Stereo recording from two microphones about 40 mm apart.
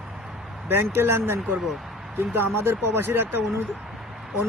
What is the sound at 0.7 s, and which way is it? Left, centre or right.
Speech, right.